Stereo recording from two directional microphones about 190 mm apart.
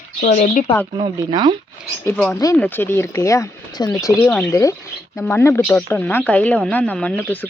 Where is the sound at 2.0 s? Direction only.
5° left (ahead or behind).